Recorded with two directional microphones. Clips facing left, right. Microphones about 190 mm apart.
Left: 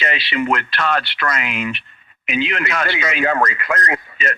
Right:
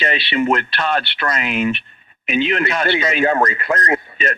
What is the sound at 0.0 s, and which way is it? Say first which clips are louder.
Speech: right 3 dB; 30° right (ahead or behind).